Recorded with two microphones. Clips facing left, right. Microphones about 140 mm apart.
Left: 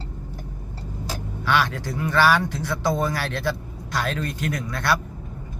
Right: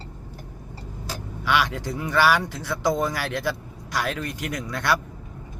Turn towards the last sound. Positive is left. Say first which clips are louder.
# left 1 dB
turn(degrees=-15)  # may be behind; listen again after turning